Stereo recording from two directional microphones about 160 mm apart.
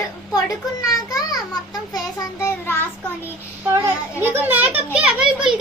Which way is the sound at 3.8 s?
15° right (ahead or behind).